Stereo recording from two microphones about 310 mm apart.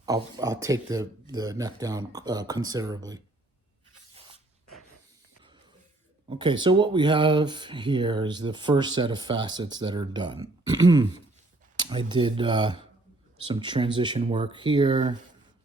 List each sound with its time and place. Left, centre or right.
0.0 s speech: centre
6.2 s speech: centre